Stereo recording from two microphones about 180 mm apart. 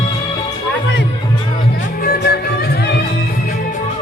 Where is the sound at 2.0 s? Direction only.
60° left (ahead or behind).